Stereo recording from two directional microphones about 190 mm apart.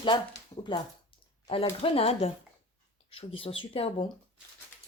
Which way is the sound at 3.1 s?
30° left (ahead or behind).